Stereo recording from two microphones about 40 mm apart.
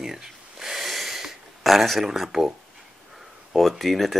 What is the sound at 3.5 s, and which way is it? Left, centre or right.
Speech, centre.